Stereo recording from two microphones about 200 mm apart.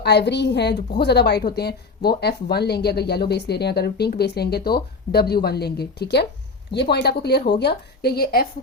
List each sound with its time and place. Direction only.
0.0 s a woman's voice: 55° left (ahead or behind)